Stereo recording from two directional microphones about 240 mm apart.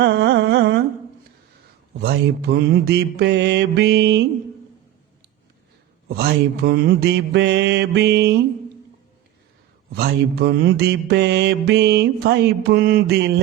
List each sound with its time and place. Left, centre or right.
0.0 s a sound: right
2.0 s mantra: right
6.1 s mantra: right
9.9 s mantra: right